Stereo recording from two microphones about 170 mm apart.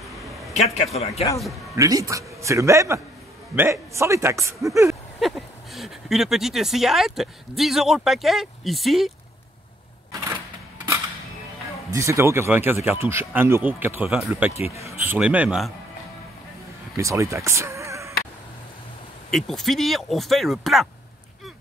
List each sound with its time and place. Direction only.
0.0 s a sound: centre (ahead or behind)
0.9 s speech: 40° left (ahead or behind)
1.8 s speech: 20° right (ahead or behind)
5.2 s a woman's voice: centre (ahead or behind)
11.9 s speech: 15° right (ahead or behind)
16.9 s speech: 15° right (ahead or behind)
19.3 s a woman's voice: centre (ahead or behind)